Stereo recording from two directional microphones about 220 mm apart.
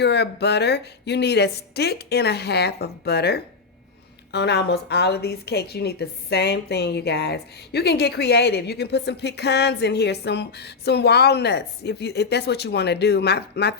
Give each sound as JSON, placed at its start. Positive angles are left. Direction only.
{"t": 0.0, "sound": "a woman's voice", "side_deg": 50}